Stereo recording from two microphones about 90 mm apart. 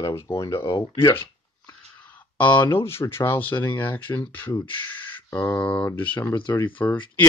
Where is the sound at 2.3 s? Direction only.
20° left (ahead or behind).